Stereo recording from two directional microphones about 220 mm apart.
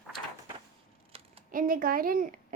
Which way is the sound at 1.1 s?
25° right (ahead or behind).